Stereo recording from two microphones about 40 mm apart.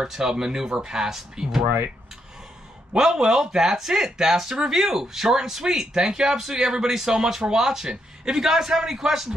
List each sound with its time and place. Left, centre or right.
0.0 s speech: centre
2.9 s speech: centre